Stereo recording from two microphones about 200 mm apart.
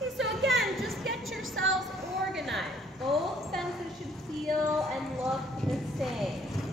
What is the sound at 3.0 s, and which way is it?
Speech, centre (ahead or behind).